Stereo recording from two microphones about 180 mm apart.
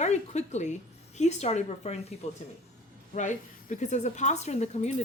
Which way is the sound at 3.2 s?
40° left (ahead or behind).